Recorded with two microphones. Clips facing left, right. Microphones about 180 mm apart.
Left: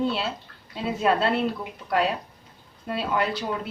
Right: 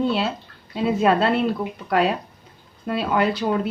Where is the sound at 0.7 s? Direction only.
70° right (ahead or behind).